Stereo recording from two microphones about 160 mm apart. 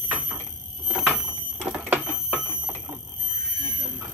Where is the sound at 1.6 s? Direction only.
10° right (ahead or behind).